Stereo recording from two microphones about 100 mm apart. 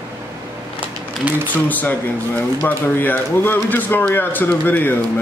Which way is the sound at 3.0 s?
20° left (ahead or behind).